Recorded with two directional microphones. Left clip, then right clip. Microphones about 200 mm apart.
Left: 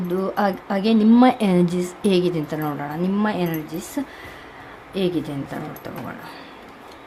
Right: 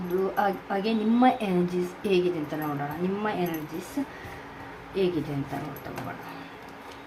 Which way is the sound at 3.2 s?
50° left (ahead or behind).